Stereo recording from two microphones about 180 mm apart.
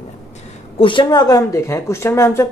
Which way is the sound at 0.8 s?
25° left (ahead or behind).